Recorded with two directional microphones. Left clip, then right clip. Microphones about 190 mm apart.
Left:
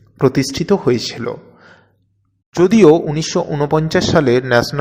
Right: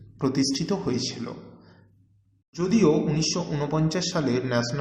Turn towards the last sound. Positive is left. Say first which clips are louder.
# left 12 dB
turn(degrees=40)  # may be behind; listen again after turning